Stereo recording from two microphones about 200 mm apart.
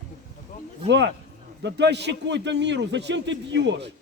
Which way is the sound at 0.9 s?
60° right (ahead or behind).